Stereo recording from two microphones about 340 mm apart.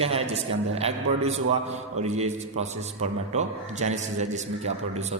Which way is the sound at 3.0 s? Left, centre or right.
Right.